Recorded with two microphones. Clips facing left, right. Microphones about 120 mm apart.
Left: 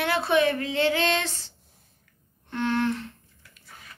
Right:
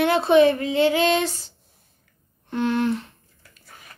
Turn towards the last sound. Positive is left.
turn(degrees=-15)  # may be behind; listen again after turning